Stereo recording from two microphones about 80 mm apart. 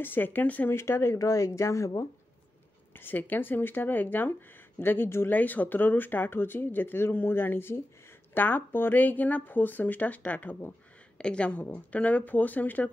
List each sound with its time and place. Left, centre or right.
0.0 s speech: left
0.7 s speech: left
3.0 s speech: left